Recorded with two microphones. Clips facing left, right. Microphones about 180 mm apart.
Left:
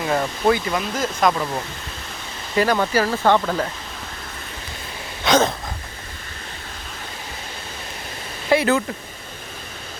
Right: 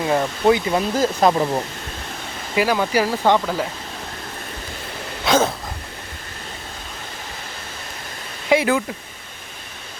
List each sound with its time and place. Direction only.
0.1 s speech: 15° right (ahead or behind)
0.7 s speech: 30° right (ahead or behind)
2.6 s speech: 5° right (ahead or behind)
5.2 s a sound: 5° right (ahead or behind)
8.4 s speech: 10° right (ahead or behind)